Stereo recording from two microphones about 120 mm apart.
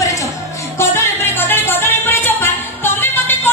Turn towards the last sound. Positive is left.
turn(degrees=20)  # may be behind; listen again after turning